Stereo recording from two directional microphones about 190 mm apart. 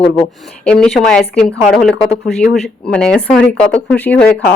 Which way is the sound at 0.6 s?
5° left (ahead or behind).